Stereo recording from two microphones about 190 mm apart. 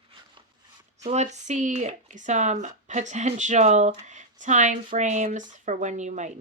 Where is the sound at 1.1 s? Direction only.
35° right (ahead or behind).